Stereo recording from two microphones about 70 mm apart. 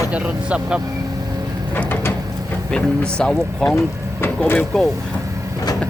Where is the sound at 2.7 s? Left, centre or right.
Centre.